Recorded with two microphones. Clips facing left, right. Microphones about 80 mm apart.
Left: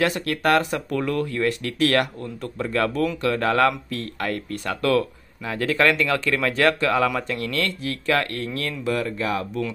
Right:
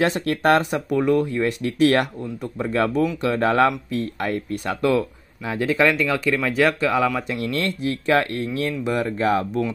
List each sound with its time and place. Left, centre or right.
0.0 s speech: right; by 7.1 s centre
7.2 s speech: right